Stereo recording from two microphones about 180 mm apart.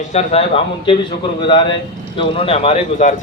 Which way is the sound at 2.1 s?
30° left (ahead or behind).